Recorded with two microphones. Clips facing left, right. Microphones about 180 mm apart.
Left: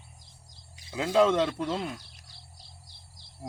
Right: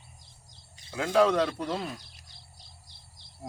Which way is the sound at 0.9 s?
15° left (ahead or behind).